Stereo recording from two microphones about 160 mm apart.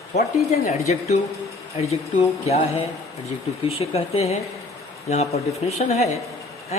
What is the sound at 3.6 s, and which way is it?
Speech, 40° left (ahead or behind).